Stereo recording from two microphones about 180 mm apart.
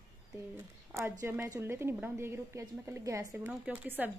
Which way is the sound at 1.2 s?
15° right (ahead or behind).